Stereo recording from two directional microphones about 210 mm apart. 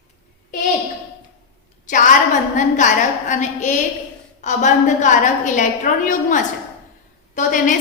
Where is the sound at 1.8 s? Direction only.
40° left (ahead or behind).